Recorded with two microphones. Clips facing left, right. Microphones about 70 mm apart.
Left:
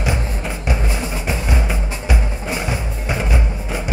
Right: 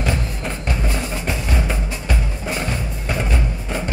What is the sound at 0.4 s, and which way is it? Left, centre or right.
Music, centre.